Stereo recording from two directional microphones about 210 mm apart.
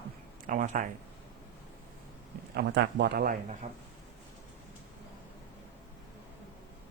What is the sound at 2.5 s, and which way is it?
Speech, 55° right (ahead or behind).